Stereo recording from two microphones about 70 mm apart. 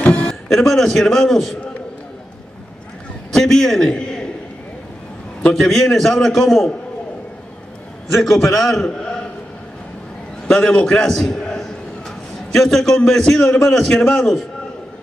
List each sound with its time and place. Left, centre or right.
0.0 s music: centre
0.3 s a man's voice: centre
3.3 s a man's voice: centre
5.5 s a man's voice: centre
8.1 s a man's voice: centre
10.5 s a man's voice: centre